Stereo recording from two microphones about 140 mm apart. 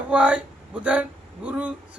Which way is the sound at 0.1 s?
10° right (ahead or behind).